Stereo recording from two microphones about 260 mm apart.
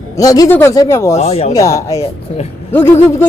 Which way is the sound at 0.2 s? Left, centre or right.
Centre.